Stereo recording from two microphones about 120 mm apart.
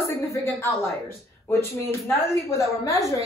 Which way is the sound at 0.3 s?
20° left (ahead or behind).